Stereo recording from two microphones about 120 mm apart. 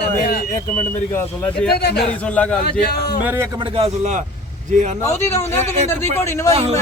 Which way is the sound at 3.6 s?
55° right (ahead or behind).